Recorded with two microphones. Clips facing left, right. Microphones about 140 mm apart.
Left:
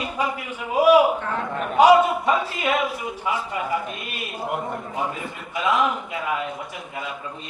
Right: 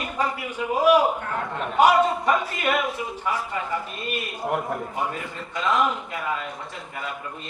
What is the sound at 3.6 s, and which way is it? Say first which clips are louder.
Speech: left 2 dB; 15° left (ahead or behind).